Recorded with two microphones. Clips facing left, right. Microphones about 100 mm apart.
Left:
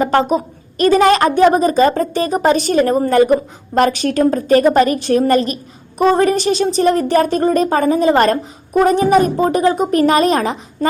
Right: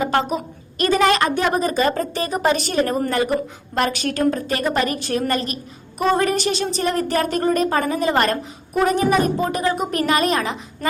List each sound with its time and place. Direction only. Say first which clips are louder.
0.0 s a woman's voice: left 6 dB; 40° left (ahead or behind)